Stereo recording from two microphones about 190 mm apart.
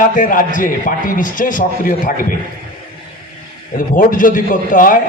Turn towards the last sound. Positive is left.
turn(degrees=45)  # may be behind; listen again after turning